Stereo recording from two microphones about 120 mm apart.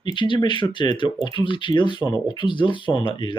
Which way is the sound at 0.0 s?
40° left (ahead or behind).